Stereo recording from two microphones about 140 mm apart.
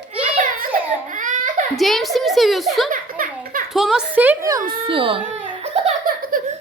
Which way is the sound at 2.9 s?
80° right.